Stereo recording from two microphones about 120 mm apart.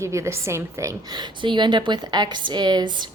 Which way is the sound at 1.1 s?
40° right (ahead or behind).